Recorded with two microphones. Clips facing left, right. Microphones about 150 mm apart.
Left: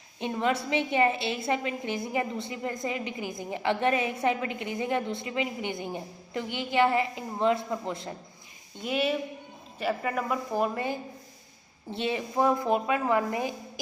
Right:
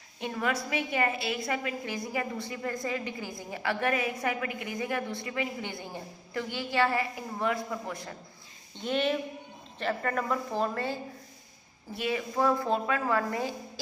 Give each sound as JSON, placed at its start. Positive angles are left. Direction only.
{"t": 0.2, "sound": "a woman's voice", "side_deg": 25}
{"t": 8.8, "sound": "speech", "side_deg": 5}
{"t": 11.9, "sound": "speech", "side_deg": 25}